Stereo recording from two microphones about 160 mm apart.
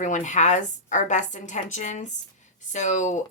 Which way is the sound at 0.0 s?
50° left (ahead or behind).